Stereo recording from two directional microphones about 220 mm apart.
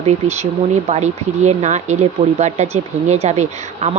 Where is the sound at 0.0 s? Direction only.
30° right (ahead or behind).